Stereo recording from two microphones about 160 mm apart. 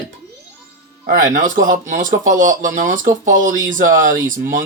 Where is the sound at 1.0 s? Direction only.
55° right (ahead or behind).